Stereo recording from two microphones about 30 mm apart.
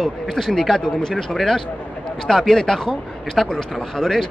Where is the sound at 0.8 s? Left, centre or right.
Left.